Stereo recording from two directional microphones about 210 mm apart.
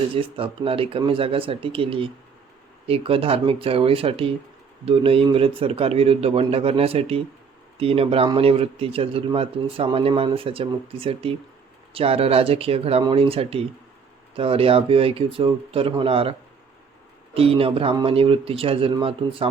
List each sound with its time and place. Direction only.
0.1 s a man's voice: 25° right (ahead or behind)
17.3 s a man's voice: 25° right (ahead or behind)